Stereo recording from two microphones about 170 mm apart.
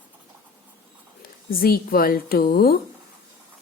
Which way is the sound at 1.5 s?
60° left (ahead or behind).